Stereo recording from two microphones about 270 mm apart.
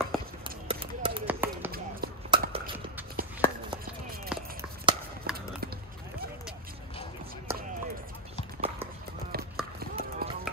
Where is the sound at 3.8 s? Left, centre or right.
Right.